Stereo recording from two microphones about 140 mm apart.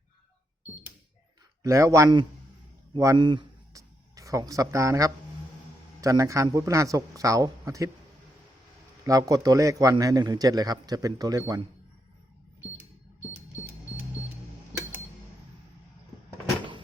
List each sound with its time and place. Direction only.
1.6 s a man's voice: 20° right (ahead or behind)
2.9 s music: 25° right (ahead or behind)
6.0 s a man's voice: 20° right (ahead or behind)
9.0 s a man's voice: 25° right (ahead or behind)